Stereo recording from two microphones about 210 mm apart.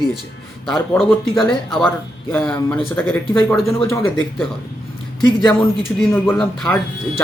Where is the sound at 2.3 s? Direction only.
5° left (ahead or behind).